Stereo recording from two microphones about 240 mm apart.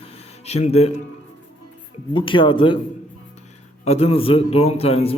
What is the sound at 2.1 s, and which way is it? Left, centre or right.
Speech, left.